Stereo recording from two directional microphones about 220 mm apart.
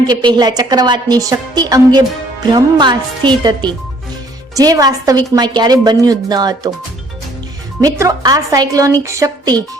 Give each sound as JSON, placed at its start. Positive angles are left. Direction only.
{"t": 0.1, "sound": "a woman's voice", "side_deg": -20}
{"t": 7.8, "sound": "a woman's voice", "side_deg": -15}